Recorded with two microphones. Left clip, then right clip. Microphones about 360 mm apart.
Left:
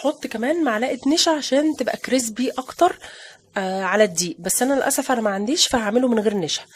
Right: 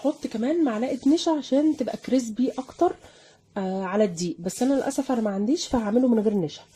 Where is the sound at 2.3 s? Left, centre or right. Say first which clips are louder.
Left 4 dB; left.